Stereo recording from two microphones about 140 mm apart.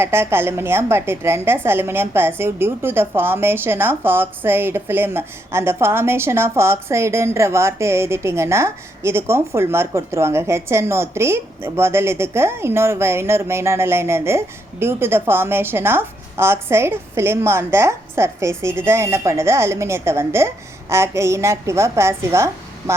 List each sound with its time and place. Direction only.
0.0 s a woman's voice: 20° right (ahead or behind)